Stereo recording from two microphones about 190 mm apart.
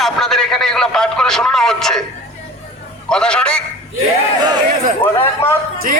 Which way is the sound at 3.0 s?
5° left (ahead or behind).